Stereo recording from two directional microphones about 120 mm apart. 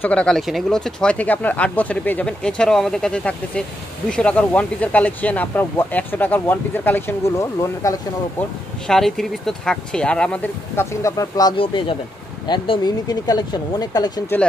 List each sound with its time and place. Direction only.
0.0 s speech: 10° left (ahead or behind); by 8.0 s 25° left (ahead or behind)
8.8 s speech: 5° left (ahead or behind)
10.8 s speech: 25° left (ahead or behind)
11.5 s speech: 45° left (ahead or behind)